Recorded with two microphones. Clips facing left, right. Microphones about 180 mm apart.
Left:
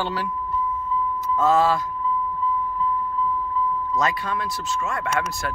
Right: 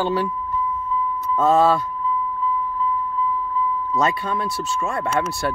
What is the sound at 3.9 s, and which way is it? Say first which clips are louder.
Speech: right 4 dB; 30° right (ahead or behind).